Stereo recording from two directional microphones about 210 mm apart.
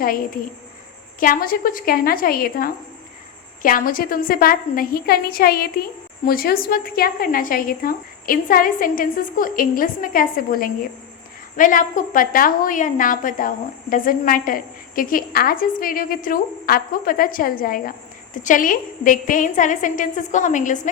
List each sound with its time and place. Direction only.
1.2 s a woman's voice: 45° left (ahead or behind)